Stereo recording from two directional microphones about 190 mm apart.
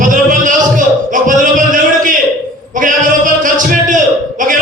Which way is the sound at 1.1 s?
45° right (ahead or behind).